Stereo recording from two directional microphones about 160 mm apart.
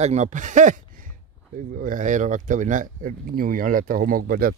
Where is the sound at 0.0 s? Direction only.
45° right (ahead or behind).